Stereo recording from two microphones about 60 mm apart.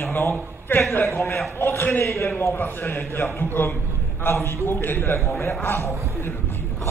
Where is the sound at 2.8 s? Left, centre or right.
Left.